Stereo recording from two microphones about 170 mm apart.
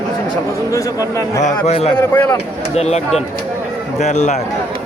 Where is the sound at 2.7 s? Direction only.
40° left (ahead or behind).